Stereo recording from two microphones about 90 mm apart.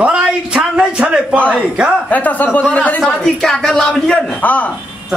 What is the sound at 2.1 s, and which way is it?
A man's voice, 15° left (ahead or behind).